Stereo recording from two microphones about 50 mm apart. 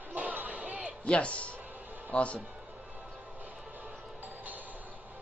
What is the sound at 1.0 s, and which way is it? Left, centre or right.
Speech, left.